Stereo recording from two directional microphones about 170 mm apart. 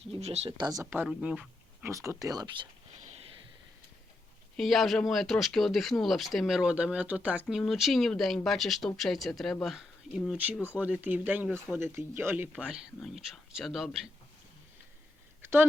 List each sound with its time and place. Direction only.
0.1 s speech: 40° right (ahead or behind)
0.6 s speech: 20° right (ahead or behind)
1.9 s speech: 15° right (ahead or behind)
4.5 s speech: centre (ahead or behind)
15.4 s a sound: 15° right (ahead or behind)